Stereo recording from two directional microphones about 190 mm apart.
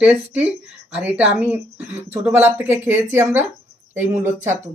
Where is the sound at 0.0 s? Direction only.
5° right (ahead or behind).